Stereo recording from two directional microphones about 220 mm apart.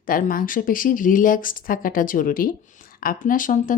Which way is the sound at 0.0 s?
40° left (ahead or behind).